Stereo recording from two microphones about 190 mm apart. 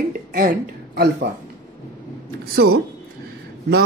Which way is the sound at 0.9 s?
55° right (ahead or behind).